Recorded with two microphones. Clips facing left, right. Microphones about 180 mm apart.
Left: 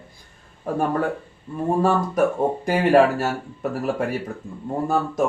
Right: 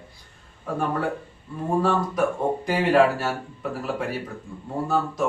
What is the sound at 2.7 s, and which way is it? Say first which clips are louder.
Speech: left 3 dB; 45° left (ahead or behind).